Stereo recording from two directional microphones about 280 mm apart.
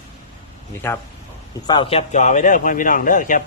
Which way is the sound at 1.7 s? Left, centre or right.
Centre.